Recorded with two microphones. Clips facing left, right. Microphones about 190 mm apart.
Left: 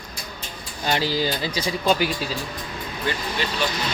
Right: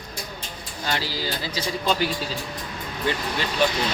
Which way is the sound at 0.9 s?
20° left (ahead or behind).